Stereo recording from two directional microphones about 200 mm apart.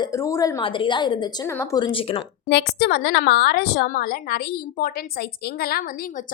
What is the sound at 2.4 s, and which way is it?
A woman's voice, 55° left (ahead or behind).